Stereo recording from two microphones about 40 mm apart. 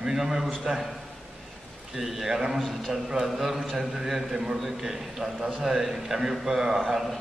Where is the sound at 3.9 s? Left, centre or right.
Centre.